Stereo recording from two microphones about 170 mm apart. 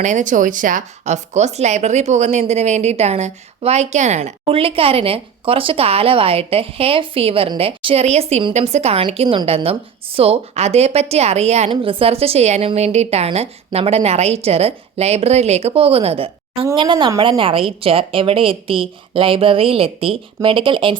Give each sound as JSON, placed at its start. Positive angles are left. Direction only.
{"t": 0.0, "sound": "speech", "side_deg": -45}